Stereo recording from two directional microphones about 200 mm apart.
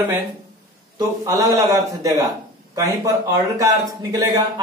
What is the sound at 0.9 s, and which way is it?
Speech, 15° right (ahead or behind).